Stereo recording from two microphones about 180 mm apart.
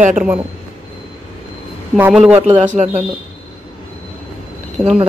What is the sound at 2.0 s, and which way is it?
Speech, 5° right (ahead or behind).